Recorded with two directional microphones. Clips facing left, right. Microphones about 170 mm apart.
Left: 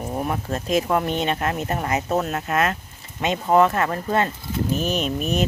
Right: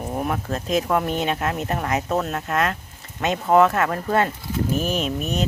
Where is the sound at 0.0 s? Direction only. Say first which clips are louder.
Even; centre (ahead or behind).